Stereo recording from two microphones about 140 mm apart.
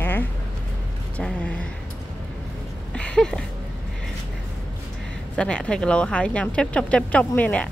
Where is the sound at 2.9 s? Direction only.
5° left (ahead or behind).